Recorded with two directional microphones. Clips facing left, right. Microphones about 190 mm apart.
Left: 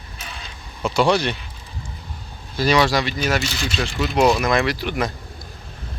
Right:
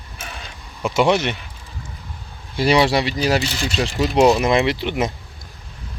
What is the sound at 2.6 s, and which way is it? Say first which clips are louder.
Speech: right 2 dB; 30° right (ahead or behind).